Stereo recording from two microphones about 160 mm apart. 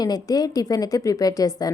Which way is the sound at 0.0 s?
25° left (ahead or behind).